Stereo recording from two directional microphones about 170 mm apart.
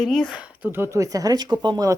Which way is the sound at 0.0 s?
Centre (ahead or behind).